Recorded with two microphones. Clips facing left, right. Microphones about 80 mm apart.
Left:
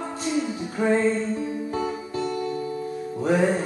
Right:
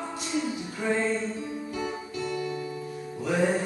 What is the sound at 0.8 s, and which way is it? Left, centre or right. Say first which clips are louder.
Music: left 5 dB; left.